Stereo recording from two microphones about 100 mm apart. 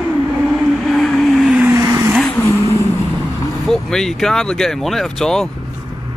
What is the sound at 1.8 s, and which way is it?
Vehicle, 35° right (ahead or behind).